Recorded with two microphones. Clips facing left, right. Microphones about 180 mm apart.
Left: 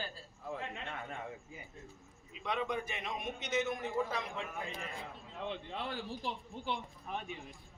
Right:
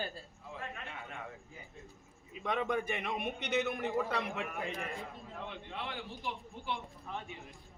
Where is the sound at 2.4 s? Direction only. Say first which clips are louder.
Right 3 dB; 50° right (ahead or behind); by 4.9 s 65° right (ahead or behind).